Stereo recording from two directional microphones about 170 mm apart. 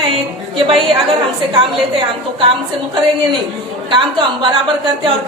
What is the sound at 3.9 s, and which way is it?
Speech, 30° right (ahead or behind).